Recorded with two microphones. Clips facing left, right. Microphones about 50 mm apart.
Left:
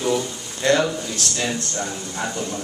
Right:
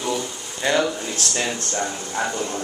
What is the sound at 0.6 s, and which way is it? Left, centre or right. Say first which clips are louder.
Speech: left 3 dB; centre.